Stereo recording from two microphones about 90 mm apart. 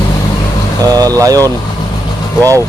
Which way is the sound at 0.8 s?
45° right (ahead or behind).